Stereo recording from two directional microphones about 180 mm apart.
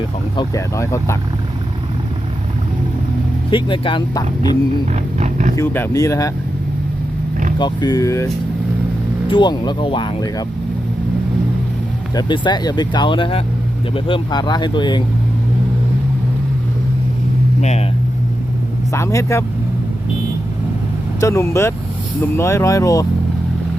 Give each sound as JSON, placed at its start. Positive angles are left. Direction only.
{"t": 0.3, "sound": "speech", "side_deg": 15}
{"t": 3.5, "sound": "speech", "side_deg": 25}
{"t": 5.1, "sound": "a sound", "side_deg": -40}
{"t": 5.5, "sound": "speech", "side_deg": 15}
{"t": 7.6, "sound": "speech", "side_deg": 20}
{"t": 12.1, "sound": "speech", "side_deg": 25}
{"t": 17.6, "sound": "speech", "side_deg": 40}
{"t": 18.9, "sound": "speech", "side_deg": 15}
{"t": 21.2, "sound": "speech", "side_deg": 15}